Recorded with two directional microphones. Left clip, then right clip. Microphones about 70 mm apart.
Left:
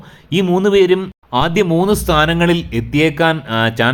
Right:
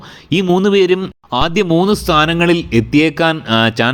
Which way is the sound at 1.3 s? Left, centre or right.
Right.